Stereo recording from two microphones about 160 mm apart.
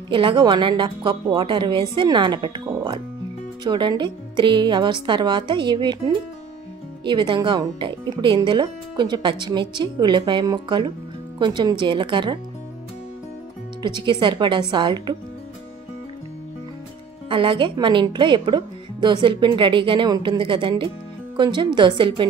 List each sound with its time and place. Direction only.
0.1 s speech: 30° right (ahead or behind)
3.6 s speech: 25° right (ahead or behind)
13.8 s speech: 30° right (ahead or behind)
17.3 s speech: 30° right (ahead or behind)